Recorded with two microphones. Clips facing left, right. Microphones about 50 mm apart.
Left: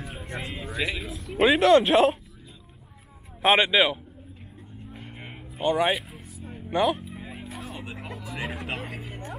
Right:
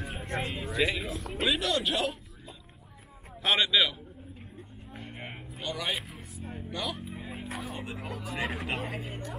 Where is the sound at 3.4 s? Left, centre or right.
Left.